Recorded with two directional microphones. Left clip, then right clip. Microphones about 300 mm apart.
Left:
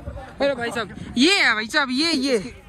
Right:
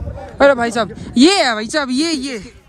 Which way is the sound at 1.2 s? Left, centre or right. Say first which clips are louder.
Right 5 dB; centre.